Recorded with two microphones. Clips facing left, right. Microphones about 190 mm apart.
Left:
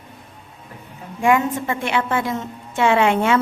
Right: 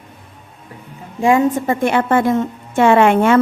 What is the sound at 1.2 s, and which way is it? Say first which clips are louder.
Speech: right 4 dB; 30° right (ahead or behind).